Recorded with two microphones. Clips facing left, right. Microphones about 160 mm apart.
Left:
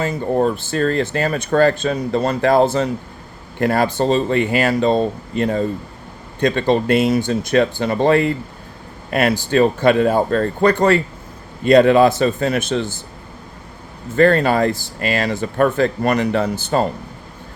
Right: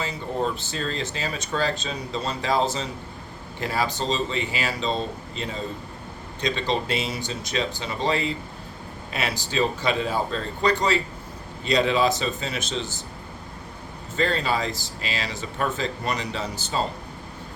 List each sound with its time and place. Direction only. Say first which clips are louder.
0.0 s speech: left 9 dB; 55° left (ahead or behind)
14.2 s speech: left 11 dB; 55° left (ahead or behind)